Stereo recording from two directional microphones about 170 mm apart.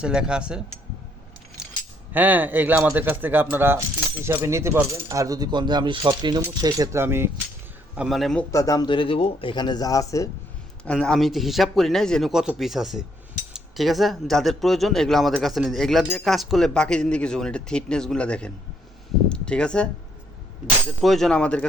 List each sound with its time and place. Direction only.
0.0 s speech: 5° right (ahead or behind)
2.1 s speech: 10° right (ahead or behind)
7.9 s speech: centre (ahead or behind)
8.4 s speech: 20° left (ahead or behind)
10.8 s speech: 5° left (ahead or behind)
21.0 s speech: centre (ahead or behind)